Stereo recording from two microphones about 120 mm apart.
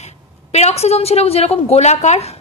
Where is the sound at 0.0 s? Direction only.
65° left (ahead or behind).